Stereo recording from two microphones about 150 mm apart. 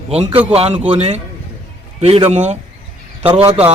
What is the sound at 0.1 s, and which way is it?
A man's voice, 40° right (ahead or behind).